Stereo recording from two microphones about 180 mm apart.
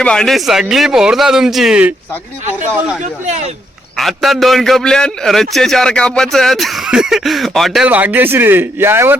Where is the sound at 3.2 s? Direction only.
40° right (ahead or behind).